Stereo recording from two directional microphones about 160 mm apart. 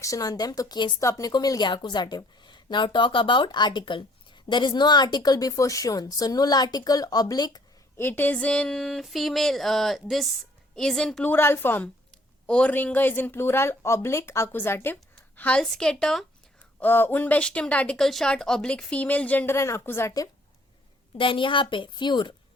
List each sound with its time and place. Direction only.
0.0 s speech: 20° left (ahead or behind)
7.9 s a sound: 15° left (ahead or behind)
12.5 s speech: 5° left (ahead or behind)
15.4 s a sound: 5° left (ahead or behind)
16.8 s speech: 10° left (ahead or behind)
21.2 s a woman's voice: 30° left (ahead or behind)